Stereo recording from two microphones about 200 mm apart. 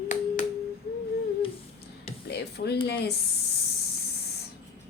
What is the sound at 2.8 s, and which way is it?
Speech, 55° left (ahead or behind).